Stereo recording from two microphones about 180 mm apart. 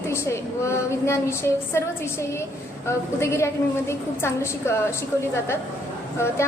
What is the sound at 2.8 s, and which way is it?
A woman's voice, 15° left (ahead or behind).